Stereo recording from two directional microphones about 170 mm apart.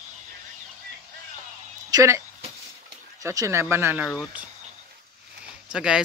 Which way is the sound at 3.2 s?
15° right (ahead or behind).